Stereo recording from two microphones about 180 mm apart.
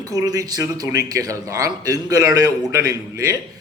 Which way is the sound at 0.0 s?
20° right (ahead or behind).